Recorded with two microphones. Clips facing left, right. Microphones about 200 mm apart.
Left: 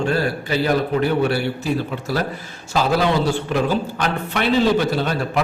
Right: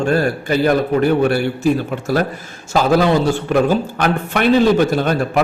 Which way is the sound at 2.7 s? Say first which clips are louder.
Right 4 dB; 50° right (ahead or behind).